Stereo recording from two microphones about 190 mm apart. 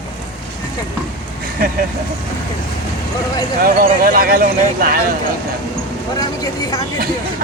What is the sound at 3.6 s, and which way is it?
Speech, 50° right (ahead or behind).